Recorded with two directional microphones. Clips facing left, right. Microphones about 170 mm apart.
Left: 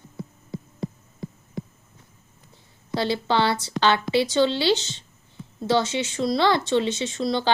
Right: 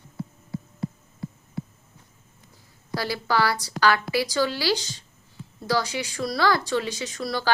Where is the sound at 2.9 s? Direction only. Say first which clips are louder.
Left 3 dB; 25° left (ahead or behind).